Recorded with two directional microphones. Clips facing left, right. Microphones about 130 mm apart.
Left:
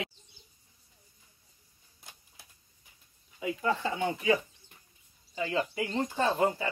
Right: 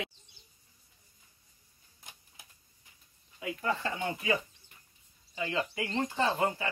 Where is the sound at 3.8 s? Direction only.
10° left (ahead or behind).